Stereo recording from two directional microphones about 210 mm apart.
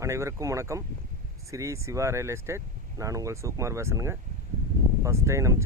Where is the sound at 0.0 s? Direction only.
15° right (ahead or behind).